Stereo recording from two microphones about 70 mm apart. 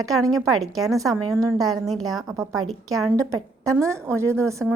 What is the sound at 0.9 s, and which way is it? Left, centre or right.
Speech, right.